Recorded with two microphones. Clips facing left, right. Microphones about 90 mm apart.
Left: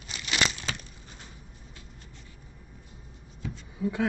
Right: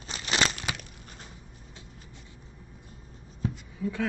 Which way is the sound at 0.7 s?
15° right (ahead or behind).